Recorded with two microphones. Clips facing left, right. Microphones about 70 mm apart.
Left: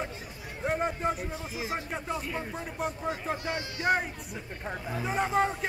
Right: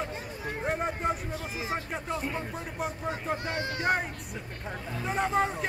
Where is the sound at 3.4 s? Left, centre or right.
Right.